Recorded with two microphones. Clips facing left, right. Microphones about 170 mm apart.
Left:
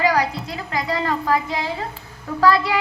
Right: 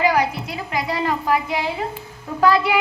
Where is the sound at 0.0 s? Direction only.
20° right (ahead or behind).